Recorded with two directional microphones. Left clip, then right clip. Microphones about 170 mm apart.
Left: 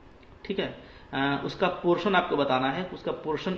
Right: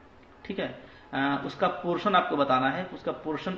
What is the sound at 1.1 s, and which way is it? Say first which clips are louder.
A man's voice: even; 25° left (ahead or behind).